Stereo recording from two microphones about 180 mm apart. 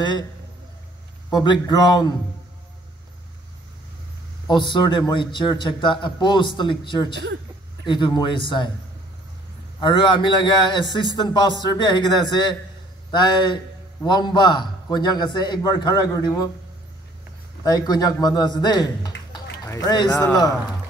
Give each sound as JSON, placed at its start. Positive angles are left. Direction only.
{"t": 1.3, "sound": "a man's voice", "side_deg": 25}
{"t": 4.5, "sound": "a man's voice", "side_deg": 25}
{"t": 9.8, "sound": "a man's voice", "side_deg": 25}
{"t": 17.6, "sound": "a man's voice", "side_deg": 20}